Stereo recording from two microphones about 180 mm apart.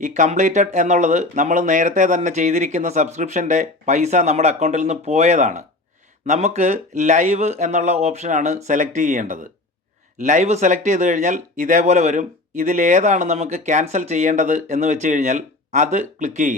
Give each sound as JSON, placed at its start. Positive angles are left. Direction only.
{"t": 0.0, "sound": "speech", "side_deg": -40}